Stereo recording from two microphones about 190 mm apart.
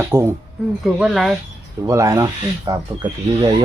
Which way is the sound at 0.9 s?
5° right (ahead or behind).